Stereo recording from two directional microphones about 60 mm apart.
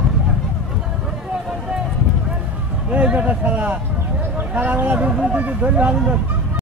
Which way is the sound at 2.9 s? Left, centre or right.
Right.